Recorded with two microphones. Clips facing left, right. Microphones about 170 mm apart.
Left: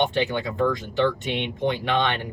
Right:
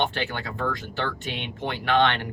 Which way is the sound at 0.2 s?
20° left (ahead or behind).